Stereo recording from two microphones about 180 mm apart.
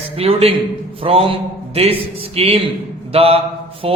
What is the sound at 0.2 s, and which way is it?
A man's voice, 35° right (ahead or behind).